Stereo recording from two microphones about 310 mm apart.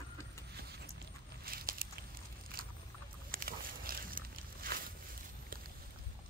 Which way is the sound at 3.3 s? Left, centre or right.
Right.